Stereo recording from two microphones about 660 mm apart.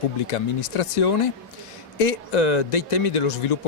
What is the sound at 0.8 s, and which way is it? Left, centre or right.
A man's voice, left.